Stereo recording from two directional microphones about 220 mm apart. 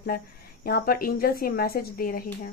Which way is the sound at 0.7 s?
45° left (ahead or behind).